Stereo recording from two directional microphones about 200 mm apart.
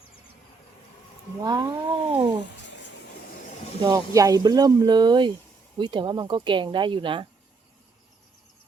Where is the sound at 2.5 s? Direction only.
60° left (ahead or behind).